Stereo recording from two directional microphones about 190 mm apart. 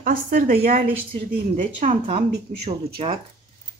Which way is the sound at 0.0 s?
45° right (ahead or behind).